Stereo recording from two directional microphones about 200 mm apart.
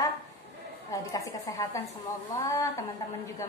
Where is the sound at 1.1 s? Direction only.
15° left (ahead or behind).